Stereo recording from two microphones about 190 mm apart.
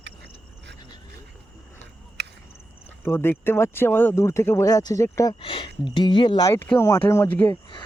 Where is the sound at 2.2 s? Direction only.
60° right (ahead or behind).